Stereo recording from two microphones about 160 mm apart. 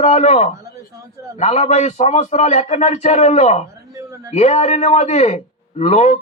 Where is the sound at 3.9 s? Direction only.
20° right (ahead or behind).